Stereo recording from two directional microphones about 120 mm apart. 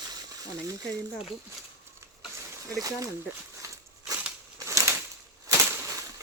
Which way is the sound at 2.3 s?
30° right (ahead or behind).